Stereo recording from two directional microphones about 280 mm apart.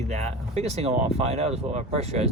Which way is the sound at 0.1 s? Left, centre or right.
Right.